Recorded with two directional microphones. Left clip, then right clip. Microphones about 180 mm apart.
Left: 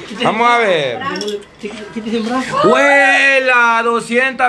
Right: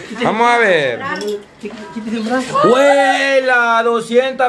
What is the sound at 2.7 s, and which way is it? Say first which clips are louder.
A man's voice: left 2 dB; centre (ahead or behind).